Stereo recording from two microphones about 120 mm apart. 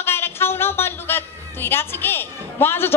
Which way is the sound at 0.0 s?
20° left (ahead or behind).